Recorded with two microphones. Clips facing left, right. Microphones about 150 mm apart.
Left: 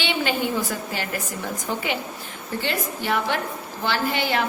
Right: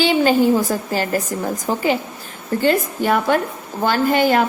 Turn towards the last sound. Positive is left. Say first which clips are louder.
# right 8 dB
turn(degrees=-45)  # may be behind; listen again after turning